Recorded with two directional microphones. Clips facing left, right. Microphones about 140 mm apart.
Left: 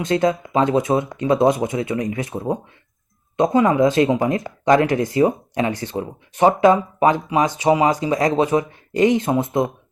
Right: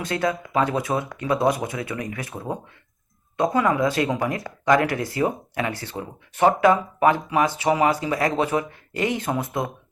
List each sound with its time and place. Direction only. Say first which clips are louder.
0.0 s speech: left 6 dB; 20° left (ahead or behind)